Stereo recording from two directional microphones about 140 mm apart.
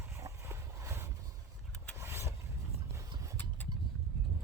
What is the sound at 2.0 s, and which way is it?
Vehicle, 20° right (ahead or behind).